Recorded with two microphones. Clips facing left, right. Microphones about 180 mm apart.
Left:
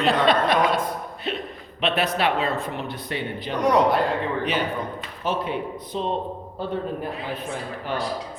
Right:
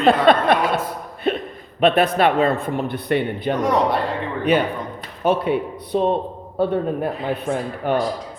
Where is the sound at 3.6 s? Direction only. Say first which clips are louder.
Left 2 dB; centre (ahead or behind).